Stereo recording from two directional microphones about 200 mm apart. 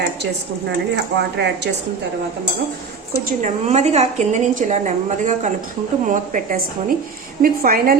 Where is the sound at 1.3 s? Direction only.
60° right (ahead or behind).